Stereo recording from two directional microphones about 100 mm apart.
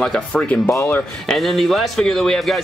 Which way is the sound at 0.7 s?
30° left (ahead or behind).